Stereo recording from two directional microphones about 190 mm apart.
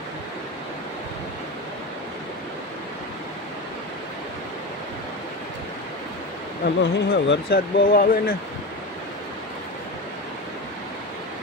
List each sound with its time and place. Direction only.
6.6 s speech: 60° left (ahead or behind)